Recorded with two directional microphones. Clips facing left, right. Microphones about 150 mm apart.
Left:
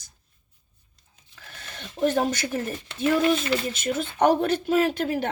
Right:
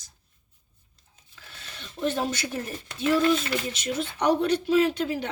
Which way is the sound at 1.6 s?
55° left (ahead or behind).